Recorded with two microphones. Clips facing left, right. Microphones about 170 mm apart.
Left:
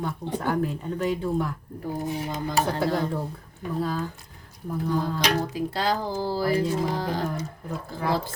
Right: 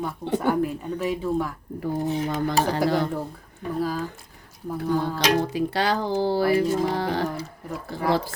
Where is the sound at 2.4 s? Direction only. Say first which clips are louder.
Right 1 dB; 75° right (ahead or behind).